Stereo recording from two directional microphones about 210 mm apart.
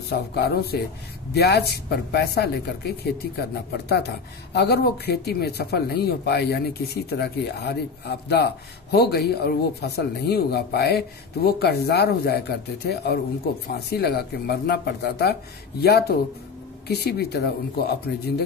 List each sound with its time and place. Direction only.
0.3 s speech: 50° left (ahead or behind)